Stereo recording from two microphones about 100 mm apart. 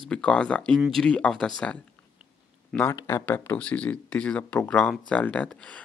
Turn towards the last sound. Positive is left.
turn(degrees=10)  # may be behind; listen again after turning